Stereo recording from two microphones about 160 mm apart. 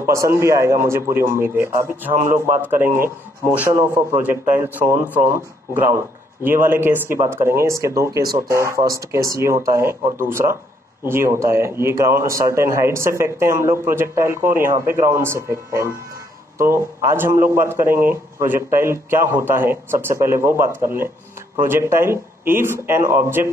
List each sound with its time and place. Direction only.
0.0 s speech: 15° right (ahead or behind)
4.2 s speech: 10° right (ahead or behind)